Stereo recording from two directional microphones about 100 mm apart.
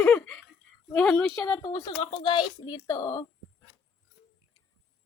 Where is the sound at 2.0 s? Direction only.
75° left (ahead or behind).